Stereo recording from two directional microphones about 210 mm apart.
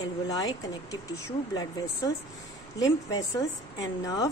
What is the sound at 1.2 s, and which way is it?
A woman's voice, 15° left (ahead or behind).